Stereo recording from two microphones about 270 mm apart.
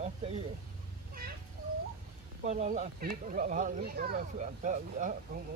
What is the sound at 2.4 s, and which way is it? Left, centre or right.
Speech, right.